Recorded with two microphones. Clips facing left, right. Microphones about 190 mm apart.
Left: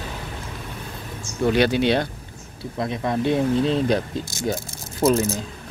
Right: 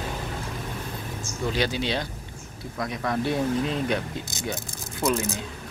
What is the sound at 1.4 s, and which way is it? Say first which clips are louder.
Speech: left 8 dB; 60° left (ahead or behind).